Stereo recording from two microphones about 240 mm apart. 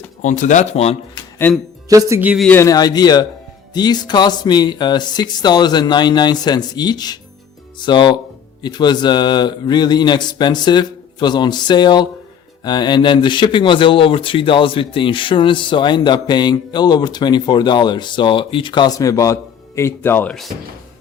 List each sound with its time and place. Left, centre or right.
0.2 s speech: left
1.9 s speech: centre
2.5 s speech: centre